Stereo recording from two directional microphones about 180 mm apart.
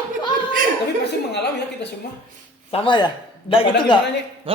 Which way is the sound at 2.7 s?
30° left (ahead or behind).